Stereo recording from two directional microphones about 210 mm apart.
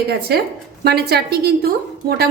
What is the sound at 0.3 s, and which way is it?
A woman's voice, 50° right (ahead or behind).